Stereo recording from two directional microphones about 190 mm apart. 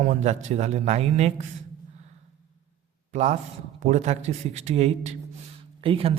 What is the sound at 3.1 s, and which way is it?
Speech, 40° right (ahead or behind).